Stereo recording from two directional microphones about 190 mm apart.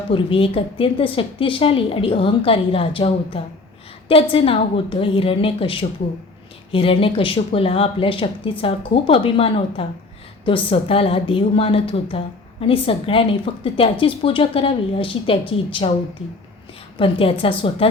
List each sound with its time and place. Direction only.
0.1 s a woman's voice: 30° left (ahead or behind)
17.0 s a woman's voice: 30° left (ahead or behind)